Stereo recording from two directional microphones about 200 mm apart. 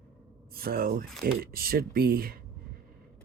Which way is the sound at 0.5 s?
50° right (ahead or behind).